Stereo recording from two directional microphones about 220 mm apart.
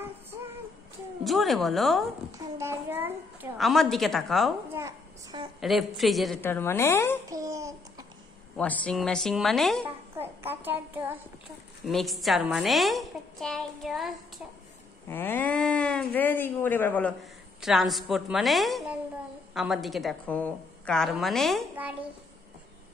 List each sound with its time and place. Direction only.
1.2 s speech: centre (ahead or behind)
2.3 s speech: 15° right (ahead or behind)
4.7 s a child's voice: 15° right (ahead or behind)
5.6 s speech: centre (ahead or behind)
6.4 s a woman's voice: 10° left (ahead or behind)
7.2 s a child's voice: 15° right (ahead or behind)
8.5 s speech: 5° left (ahead or behind)
10.1 s a child's voice: 10° right (ahead or behind)